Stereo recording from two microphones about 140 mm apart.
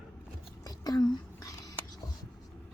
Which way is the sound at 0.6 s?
25° left (ahead or behind).